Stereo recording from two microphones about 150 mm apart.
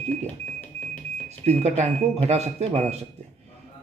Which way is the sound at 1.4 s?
45° right (ahead or behind).